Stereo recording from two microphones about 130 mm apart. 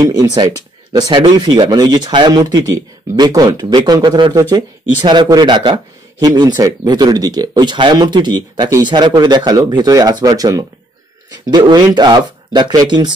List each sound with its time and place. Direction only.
0.0 s speech: 30° right (ahead or behind)